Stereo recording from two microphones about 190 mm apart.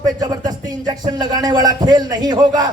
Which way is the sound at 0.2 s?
20° right (ahead or behind).